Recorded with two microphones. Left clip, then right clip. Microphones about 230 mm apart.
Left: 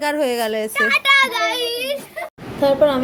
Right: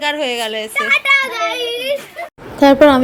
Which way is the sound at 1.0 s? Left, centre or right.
Left.